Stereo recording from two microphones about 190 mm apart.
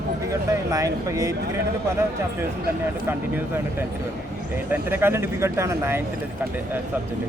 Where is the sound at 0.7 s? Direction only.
15° right (ahead or behind).